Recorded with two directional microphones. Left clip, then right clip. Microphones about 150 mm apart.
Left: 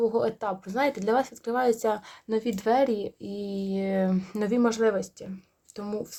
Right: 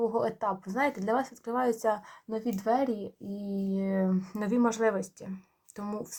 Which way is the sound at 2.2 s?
70° left (ahead or behind).